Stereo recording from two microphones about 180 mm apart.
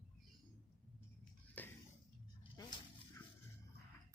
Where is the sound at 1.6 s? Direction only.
10° left (ahead or behind).